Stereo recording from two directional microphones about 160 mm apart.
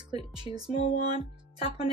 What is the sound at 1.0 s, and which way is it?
Speech, 25° right (ahead or behind).